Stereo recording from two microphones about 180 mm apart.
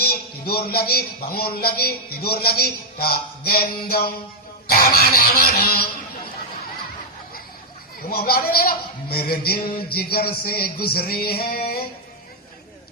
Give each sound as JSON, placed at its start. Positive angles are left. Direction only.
{"t": 0.0, "sound": "a man's voice", "side_deg": 60}
{"t": 8.1, "sound": "a man's voice", "side_deg": 60}